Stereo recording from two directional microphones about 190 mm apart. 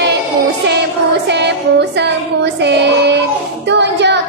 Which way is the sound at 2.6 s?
65° right (ahead or behind).